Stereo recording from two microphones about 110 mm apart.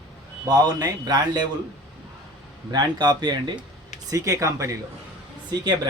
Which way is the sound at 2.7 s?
40° right (ahead or behind).